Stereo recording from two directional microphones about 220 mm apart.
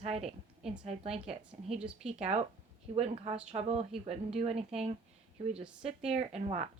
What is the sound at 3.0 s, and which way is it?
A woman's voice, 30° right (ahead or behind).